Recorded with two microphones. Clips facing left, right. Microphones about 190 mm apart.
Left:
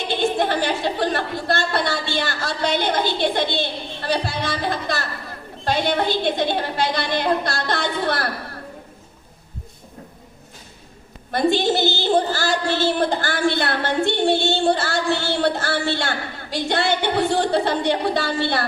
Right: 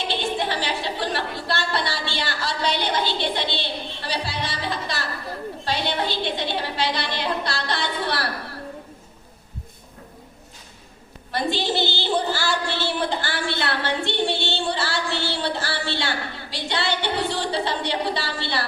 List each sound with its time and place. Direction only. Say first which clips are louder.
0.1 s a woman's voice: left 7 dB; 50° left (ahead or behind)
11.3 s a woman's voice: left 6 dB; 50° left (ahead or behind)